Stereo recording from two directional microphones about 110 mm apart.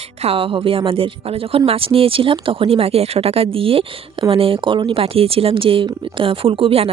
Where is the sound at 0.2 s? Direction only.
60° right (ahead or behind).